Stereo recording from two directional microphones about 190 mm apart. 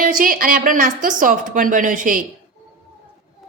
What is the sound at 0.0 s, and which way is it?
A woman's voice, 45° right (ahead or behind).